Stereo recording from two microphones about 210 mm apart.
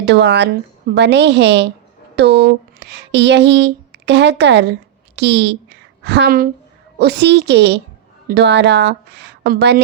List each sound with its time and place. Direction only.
0.0 s a woman's voice: 55° right (ahead or behind)